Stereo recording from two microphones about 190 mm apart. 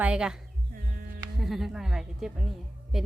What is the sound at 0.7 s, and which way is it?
Music, 50° right (ahead or behind).